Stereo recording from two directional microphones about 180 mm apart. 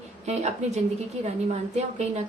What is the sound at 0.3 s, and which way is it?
Speech, 40° right (ahead or behind).